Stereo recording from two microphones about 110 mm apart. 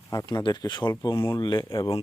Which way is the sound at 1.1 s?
25° left (ahead or behind).